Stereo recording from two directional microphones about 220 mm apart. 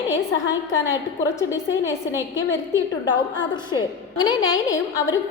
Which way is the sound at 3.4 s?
20° left (ahead or behind).